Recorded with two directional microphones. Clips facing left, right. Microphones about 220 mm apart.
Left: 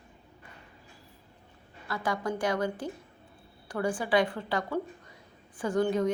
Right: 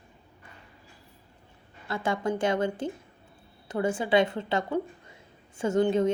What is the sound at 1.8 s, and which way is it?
A woman's voice, 25° right (ahead or behind).